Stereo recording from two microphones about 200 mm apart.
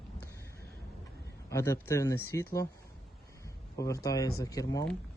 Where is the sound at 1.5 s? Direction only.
15° left (ahead or behind).